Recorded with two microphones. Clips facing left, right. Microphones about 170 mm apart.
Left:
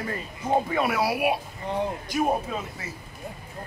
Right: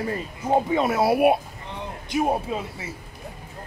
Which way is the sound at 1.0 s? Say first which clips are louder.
Right 6 dB; 50° right (ahead or behind).